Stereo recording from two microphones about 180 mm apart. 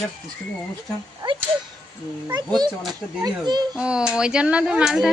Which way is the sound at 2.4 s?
20° right (ahead or behind).